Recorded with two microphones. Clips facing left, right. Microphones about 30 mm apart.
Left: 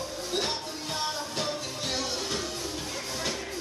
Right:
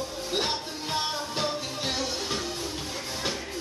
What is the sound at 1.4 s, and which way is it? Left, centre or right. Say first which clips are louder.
Music: right 3 dB; centre.